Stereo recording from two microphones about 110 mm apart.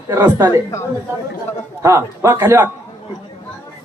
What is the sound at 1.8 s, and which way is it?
Speech, 25° right (ahead or behind).